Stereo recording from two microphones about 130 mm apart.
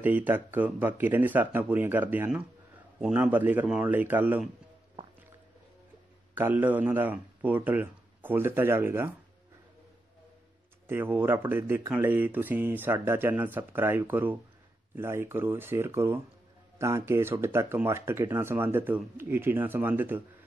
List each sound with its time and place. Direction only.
0.0 s speech: 15° right (ahead or behind)
6.3 s speech: 15° right (ahead or behind)
10.9 s speech: 15° right (ahead or behind)